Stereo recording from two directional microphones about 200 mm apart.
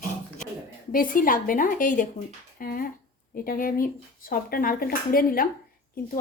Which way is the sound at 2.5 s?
45° left (ahead or behind).